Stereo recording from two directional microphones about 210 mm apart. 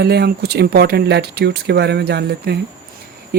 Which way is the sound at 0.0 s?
50° right (ahead or behind).